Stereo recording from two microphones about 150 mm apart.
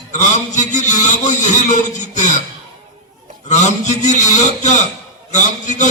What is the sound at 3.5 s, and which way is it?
A man's voice, 50° left (ahead or behind).